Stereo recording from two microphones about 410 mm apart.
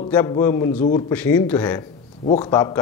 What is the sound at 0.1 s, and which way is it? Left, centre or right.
A man's voice, centre.